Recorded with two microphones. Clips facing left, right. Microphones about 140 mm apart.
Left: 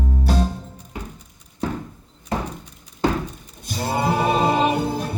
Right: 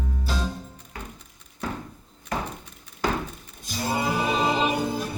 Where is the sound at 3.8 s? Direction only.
60° left (ahead or behind).